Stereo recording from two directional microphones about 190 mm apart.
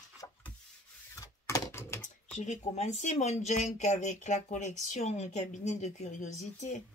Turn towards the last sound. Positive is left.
turn(degrees=40)  # may be behind; listen again after turning